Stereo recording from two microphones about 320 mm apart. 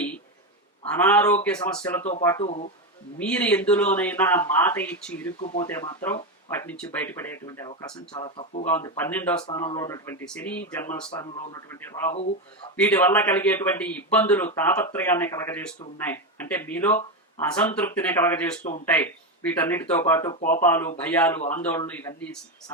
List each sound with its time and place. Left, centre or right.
1.0 s speech: centre
3.2 s speech: centre
12.7 s speech: centre